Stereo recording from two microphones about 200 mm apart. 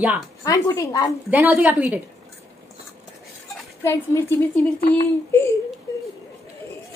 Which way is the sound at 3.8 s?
15° left (ahead or behind).